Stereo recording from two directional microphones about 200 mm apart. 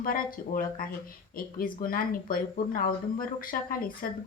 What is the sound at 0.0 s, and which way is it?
Speech, 45° left (ahead or behind).